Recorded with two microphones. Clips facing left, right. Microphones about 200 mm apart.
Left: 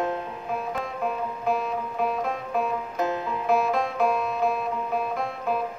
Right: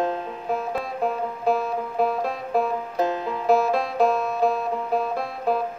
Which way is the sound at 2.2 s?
35° right (ahead or behind).